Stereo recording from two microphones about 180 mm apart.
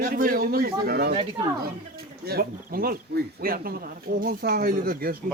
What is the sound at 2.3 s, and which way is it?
Speech, 60° right (ahead or behind).